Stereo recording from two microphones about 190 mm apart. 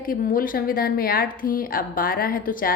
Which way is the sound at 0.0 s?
50° left (ahead or behind).